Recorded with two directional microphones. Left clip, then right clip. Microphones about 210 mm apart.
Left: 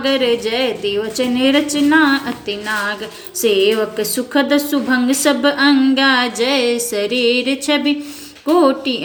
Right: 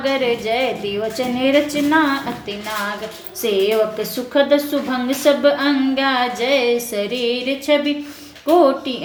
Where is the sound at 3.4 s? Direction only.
20° left (ahead or behind).